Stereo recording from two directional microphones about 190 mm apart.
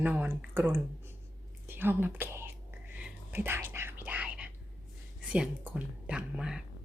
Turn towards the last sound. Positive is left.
turn(degrees=-5)  # may be behind; listen again after turning